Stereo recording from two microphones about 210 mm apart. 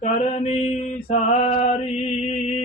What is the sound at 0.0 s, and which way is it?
Mantra, 30° left (ahead or behind).